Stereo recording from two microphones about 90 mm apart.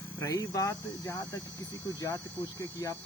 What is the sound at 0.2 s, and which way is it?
Speech, 40° left (ahead or behind).